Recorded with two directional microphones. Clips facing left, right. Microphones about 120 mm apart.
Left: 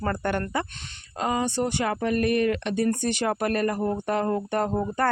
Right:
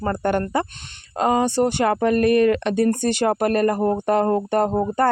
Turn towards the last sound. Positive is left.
turn(degrees=-35)  # may be behind; listen again after turning